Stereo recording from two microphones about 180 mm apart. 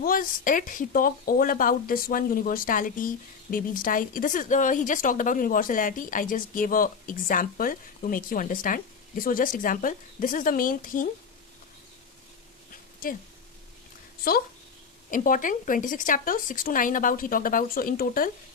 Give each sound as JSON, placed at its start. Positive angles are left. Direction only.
{"t": 0.0, "sound": "speech", "side_deg": 50}
{"t": 13.0, "sound": "speech", "side_deg": 50}
{"t": 15.1, "sound": "speech", "side_deg": 50}